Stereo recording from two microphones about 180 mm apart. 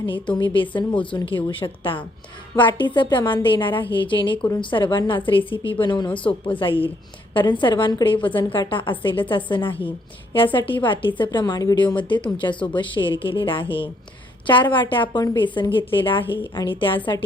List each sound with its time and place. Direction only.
0.0 s a woman's voice: 25° left (ahead or behind)